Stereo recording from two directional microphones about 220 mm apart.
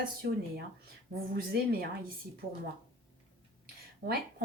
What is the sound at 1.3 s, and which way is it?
Speech, 45° right (ahead or behind).